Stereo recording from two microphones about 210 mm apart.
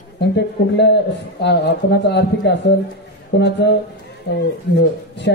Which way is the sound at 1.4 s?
55° left (ahead or behind).